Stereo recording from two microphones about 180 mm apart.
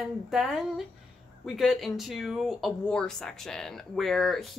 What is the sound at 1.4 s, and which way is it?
Speech, centre (ahead or behind).